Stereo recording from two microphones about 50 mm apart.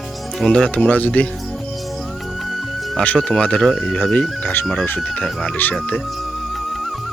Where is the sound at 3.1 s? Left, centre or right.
Centre.